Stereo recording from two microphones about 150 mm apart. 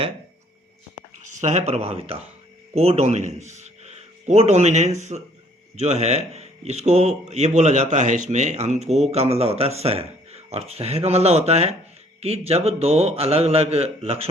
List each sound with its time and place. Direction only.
1.2 s a man's voice: 55° right (ahead or behind)